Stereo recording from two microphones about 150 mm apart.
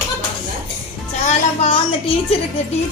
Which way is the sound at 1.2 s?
40° left (ahead or behind).